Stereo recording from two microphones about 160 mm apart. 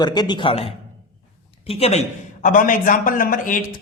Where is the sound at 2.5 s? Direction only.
60° left (ahead or behind).